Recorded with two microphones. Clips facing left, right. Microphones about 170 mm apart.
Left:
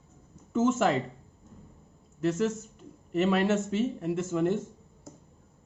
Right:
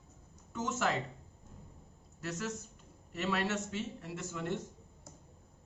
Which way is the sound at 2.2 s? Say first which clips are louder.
Left 12 dB; 25° left (ahead or behind).